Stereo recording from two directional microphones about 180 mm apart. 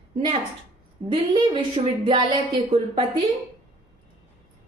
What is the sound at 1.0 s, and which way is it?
A woman's voice, 25° right (ahead or behind).